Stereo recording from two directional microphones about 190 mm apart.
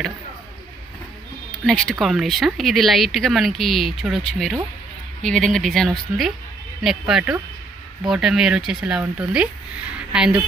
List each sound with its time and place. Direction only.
1.5 s speech: 5° left (ahead or behind)